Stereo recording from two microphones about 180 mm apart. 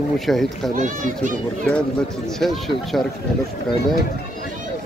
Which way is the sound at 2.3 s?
Centre (ahead or behind).